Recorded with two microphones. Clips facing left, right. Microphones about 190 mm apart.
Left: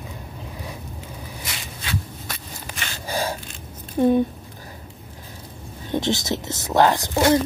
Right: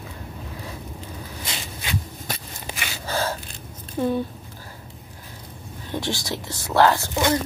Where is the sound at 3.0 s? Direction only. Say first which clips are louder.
Even; 15° left (ahead or behind).